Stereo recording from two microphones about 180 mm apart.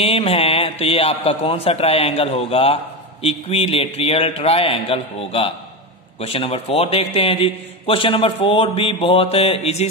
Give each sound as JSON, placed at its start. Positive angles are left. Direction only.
{"t": 0.0, "sound": "a man's voice", "side_deg": 30}